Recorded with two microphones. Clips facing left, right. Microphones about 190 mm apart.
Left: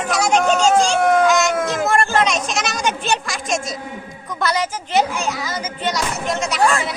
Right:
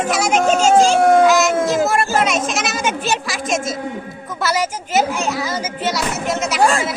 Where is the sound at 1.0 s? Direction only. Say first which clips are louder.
Right 3 dB; 30° right (ahead or behind).